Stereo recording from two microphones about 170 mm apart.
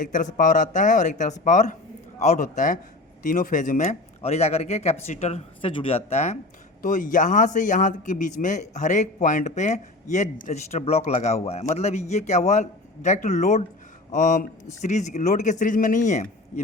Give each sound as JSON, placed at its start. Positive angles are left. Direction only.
{"t": 0.0, "sound": "a man's voice", "side_deg": 50}
{"t": 6.8, "sound": "a man's voice", "side_deg": 50}